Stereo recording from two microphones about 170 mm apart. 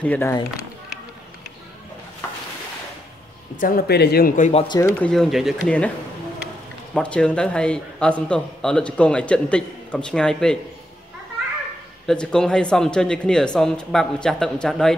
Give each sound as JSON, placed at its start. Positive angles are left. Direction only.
{"t": 0.0, "sound": "speech", "side_deg": 10}
{"t": 3.5, "sound": "speech", "side_deg": 60}
{"t": 4.4, "sound": "speech", "side_deg": 40}
{"t": 4.6, "sound": "speech", "side_deg": 20}
{"t": 5.0, "sound": "a man's voice", "side_deg": 0}
{"t": 6.9, "sound": "a man's voice", "side_deg": 5}
{"t": 12.1, "sound": "a man's voice", "side_deg": 5}